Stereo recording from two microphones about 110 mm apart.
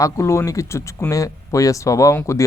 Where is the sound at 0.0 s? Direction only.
25° left (ahead or behind).